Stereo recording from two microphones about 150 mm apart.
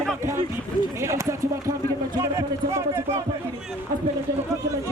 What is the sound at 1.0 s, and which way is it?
A man's voice, 20° right (ahead or behind).